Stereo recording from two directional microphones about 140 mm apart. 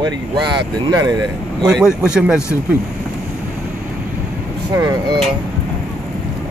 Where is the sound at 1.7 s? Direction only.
5° right (ahead or behind).